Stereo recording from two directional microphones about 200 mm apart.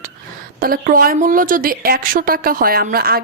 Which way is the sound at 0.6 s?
45° right (ahead or behind).